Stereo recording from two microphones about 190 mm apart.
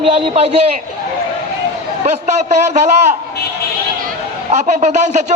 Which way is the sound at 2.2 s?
35° right (ahead or behind).